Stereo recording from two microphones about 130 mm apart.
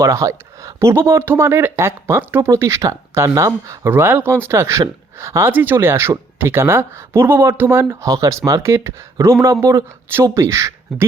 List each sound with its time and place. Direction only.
0.0 s speech: 25° right (ahead or behind)